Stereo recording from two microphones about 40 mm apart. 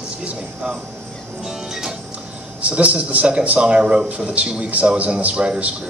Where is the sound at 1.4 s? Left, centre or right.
Centre.